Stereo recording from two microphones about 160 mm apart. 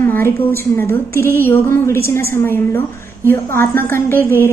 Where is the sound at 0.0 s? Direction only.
15° left (ahead or behind).